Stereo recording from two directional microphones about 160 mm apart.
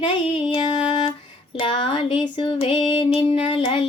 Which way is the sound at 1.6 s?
35° left (ahead or behind).